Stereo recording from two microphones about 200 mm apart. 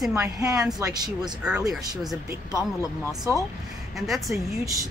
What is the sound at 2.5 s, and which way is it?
Speech, 15° left (ahead or behind).